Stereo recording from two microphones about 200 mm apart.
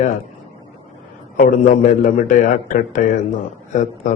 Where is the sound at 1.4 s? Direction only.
40° left (ahead or behind).